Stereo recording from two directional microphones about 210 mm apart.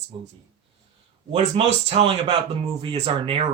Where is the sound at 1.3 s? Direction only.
30° right (ahead or behind).